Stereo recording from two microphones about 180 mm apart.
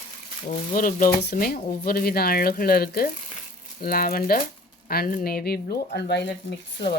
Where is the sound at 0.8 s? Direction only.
50° left (ahead or behind); by 6.3 s 70° left (ahead or behind).